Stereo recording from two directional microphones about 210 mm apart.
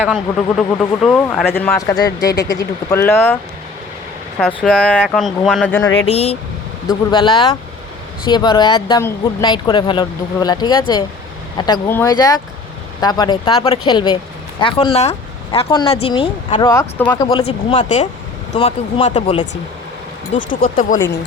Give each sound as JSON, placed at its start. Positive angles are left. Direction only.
{"t": 0.0, "sound": "speech", "side_deg": 0}
{"t": 1.5, "sound": "speech", "side_deg": 10}
{"t": 2.3, "sound": "speech", "side_deg": 55}
{"t": 2.6, "sound": "speech", "side_deg": 15}
{"t": 4.4, "sound": "speech", "side_deg": 0}
{"t": 6.1, "sound": "speech", "side_deg": 30}
{"t": 17.4, "sound": "speech", "side_deg": 30}
{"t": 18.5, "sound": "speech", "side_deg": 25}
{"t": 19.0, "sound": "speech", "side_deg": 35}
{"t": 20.5, "sound": "speech", "side_deg": 40}